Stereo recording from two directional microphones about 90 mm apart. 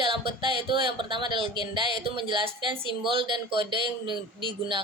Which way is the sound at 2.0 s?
65° right (ahead or behind).